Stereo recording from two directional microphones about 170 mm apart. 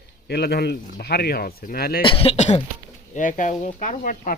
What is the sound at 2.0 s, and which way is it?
Speech, 35° left (ahead or behind).